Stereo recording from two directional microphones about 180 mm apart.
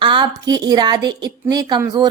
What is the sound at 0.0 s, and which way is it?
A woman's voice, 25° right (ahead or behind).